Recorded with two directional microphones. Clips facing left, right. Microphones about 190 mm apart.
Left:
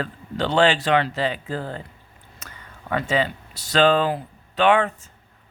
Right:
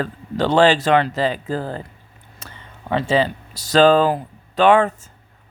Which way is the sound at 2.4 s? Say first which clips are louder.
Right 3 dB; 25° right (ahead or behind).